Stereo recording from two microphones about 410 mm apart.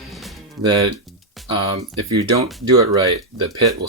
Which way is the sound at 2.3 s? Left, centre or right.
Right.